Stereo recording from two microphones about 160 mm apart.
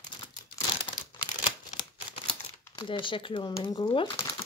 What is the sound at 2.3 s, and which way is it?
Speech, 30° left (ahead or behind).